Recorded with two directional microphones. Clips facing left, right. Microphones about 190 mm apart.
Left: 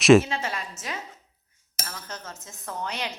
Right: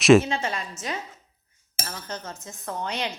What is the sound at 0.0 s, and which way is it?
Speech, centre (ahead or behind).